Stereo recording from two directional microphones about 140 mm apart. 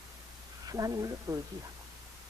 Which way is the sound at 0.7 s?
25° right (ahead or behind).